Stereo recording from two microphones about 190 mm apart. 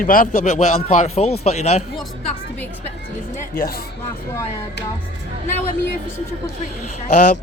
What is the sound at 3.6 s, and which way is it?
Speech, 55° left (ahead or behind).